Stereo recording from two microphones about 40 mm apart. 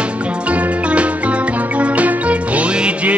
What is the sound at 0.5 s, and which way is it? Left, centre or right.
Music, right.